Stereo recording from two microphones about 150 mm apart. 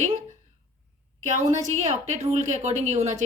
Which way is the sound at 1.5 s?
50° right (ahead or behind).